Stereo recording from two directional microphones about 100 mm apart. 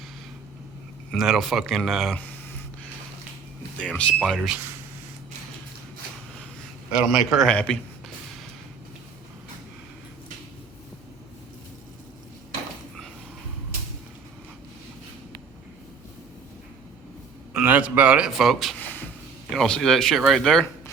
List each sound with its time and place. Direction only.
1.1 s speech: centre (ahead or behind)
2.1 s a sound: 15° left (ahead or behind)
3.8 s speech: 10° left (ahead or behind)
4.4 s speech: 5° right (ahead or behind)
6.9 s a man's voice: 5° right (ahead or behind)
7.4 s speech: 10° left (ahead or behind)
17.5 s a sound: 15° right (ahead or behind)
18.3 s speech: centre (ahead or behind)
18.8 s a sound: 20° left (ahead or behind)
19.5 s speech: 5° left (ahead or behind)